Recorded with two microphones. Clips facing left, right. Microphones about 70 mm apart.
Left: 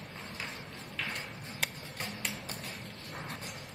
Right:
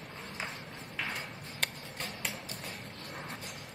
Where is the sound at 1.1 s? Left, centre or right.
Centre.